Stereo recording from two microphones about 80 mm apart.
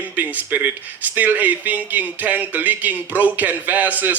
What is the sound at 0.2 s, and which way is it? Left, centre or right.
Speech, right.